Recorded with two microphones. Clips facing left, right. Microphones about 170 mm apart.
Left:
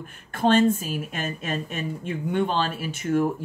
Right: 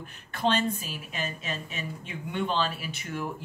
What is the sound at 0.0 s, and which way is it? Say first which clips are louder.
Speech: left 5 dB; 45° left (ahead or behind).